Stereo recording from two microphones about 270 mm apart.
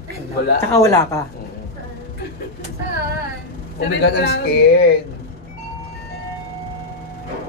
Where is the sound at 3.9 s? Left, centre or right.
Left.